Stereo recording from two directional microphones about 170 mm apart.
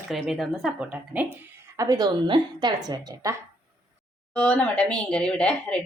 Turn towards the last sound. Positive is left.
turn(degrees=5)  # may be behind; listen again after turning